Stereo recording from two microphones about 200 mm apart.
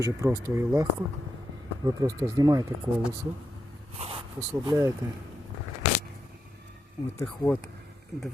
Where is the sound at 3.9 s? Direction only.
30° right (ahead or behind).